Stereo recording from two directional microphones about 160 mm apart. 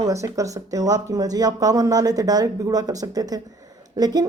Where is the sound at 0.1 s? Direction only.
20° right (ahead or behind).